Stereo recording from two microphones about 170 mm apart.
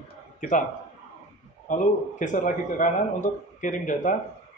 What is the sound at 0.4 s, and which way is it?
Speech, 50° left (ahead or behind).